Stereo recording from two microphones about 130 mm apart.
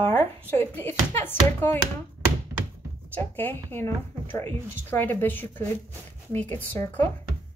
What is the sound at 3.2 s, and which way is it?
A woman's voice, 15° left (ahead or behind).